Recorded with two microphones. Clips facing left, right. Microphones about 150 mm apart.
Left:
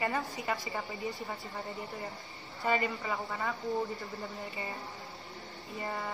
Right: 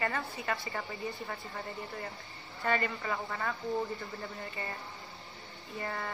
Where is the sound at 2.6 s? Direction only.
15° left (ahead or behind).